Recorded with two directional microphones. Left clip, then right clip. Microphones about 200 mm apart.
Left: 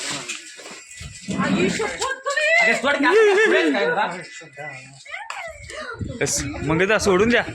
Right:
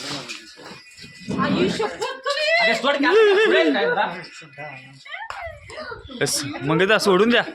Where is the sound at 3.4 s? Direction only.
Centre (ahead or behind).